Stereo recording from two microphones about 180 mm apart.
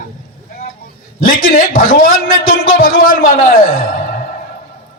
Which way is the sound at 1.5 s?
50° left (ahead or behind).